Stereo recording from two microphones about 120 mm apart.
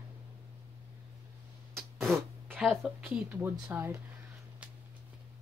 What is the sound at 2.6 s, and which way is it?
Speech, centre (ahead or behind).